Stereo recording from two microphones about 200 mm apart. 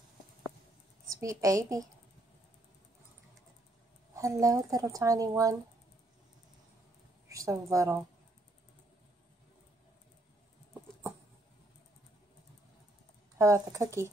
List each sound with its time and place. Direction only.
1.1 s speech: 15° right (ahead or behind)
4.1 s speech: 15° right (ahead or behind)
7.2 s speech: 15° right (ahead or behind)
13.4 s speech: 15° right (ahead or behind)